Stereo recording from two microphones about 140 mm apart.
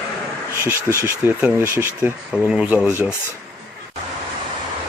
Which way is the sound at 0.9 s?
15° right (ahead or behind).